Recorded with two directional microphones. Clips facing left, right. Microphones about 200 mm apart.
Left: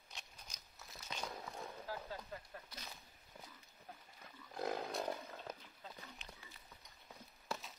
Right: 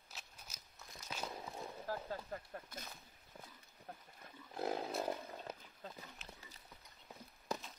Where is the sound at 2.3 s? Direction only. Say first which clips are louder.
Right 4 dB; 50° right (ahead or behind).